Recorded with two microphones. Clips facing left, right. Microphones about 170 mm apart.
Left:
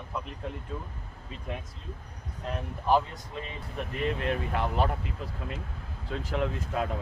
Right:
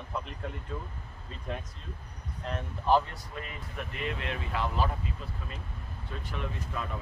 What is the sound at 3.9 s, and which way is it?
Speech, 40° left (ahead or behind).